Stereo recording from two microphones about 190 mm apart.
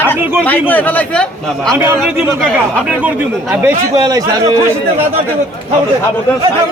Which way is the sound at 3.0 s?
10° right (ahead or behind).